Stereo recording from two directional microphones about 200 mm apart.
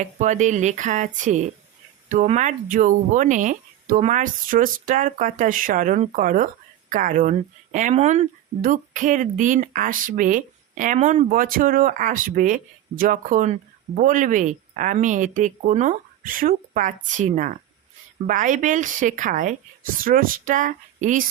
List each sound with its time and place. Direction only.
0.0 s speech: 40° right (ahead or behind)